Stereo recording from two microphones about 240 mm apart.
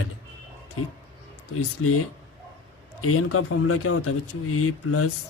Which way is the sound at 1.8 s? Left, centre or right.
Left.